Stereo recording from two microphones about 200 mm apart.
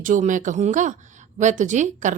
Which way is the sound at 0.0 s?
40° right (ahead or behind).